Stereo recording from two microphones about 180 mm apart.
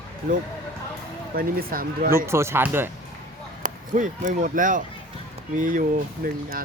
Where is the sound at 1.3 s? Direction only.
55° right (ahead or behind).